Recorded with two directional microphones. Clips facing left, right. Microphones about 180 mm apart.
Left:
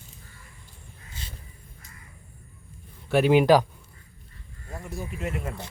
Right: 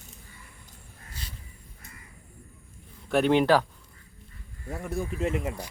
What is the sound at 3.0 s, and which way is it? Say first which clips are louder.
Speech: left 3 dB; 5° left (ahead or behind).